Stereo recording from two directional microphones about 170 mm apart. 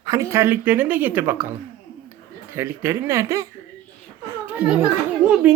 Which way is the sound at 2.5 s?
15° right (ahead or behind).